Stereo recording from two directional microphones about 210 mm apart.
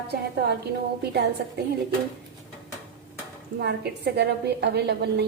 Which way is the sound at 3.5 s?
50° right (ahead or behind).